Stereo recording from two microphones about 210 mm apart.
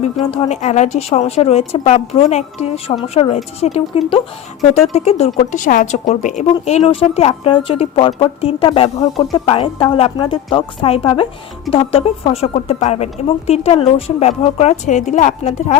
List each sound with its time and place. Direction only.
0.0 s speech: 30° left (ahead or behind)